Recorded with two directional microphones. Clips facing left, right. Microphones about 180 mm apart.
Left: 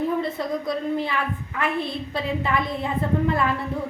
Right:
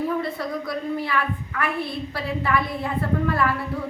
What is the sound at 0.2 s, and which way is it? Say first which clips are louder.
A woman's voice: left 2 dB; 20° left (ahead or behind).